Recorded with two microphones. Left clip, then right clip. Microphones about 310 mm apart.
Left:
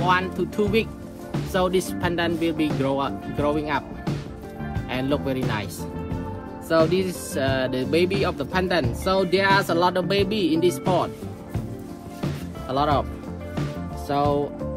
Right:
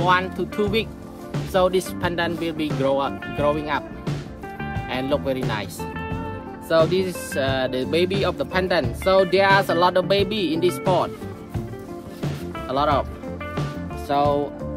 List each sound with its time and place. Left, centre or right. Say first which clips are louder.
0.0 s speech: right 2 dB; right
4.8 s speech: right 2 dB; right
6.7 s speech: right 1 dB; right
12.6 s speech: right 1 dB; right
14.0 s speech: right 2 dB; right